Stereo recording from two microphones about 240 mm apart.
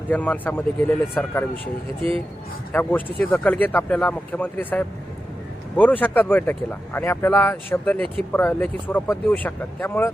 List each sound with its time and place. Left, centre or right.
0.1 s speech: centre
2.0 s speech: right
2.7 s speech: centre